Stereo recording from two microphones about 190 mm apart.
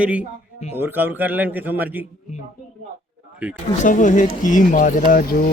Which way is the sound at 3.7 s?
40° left (ahead or behind).